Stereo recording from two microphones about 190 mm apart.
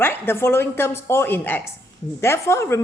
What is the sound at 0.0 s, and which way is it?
A woman's voice, 10° left (ahead or behind).